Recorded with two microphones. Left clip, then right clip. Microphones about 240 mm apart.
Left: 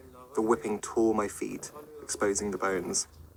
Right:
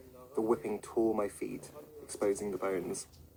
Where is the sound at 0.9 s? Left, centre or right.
Left.